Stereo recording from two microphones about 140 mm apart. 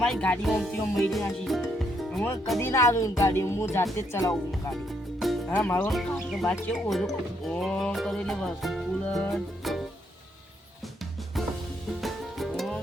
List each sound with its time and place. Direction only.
0.0 s music: 5° left (ahead or behind)
2.6 s speech: 20° left (ahead or behind)
4.7 s music: centre (ahead or behind)
5.5 s speech: 10° left (ahead or behind)
5.9 s music: centre (ahead or behind)
6.3 s speech: 5° left (ahead or behind)
11.9 s music: centre (ahead or behind)